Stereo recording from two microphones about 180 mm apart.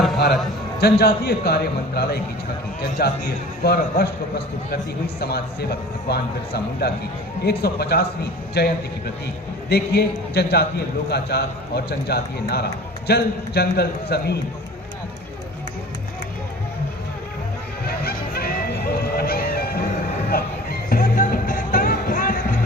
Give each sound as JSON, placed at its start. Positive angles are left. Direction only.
{"t": 0.8, "sound": "a man's voice", "side_deg": 65}
{"t": 17.8, "sound": "music", "side_deg": 60}